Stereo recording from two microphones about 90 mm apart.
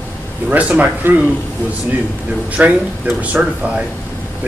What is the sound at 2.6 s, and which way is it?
Speech, 20° right (ahead or behind).